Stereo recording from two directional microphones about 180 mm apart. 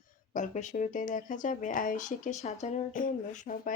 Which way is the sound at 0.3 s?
45° left (ahead or behind).